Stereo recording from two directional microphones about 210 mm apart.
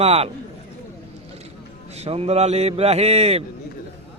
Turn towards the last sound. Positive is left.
turn(degrees=-30)  # may be behind; listen again after turning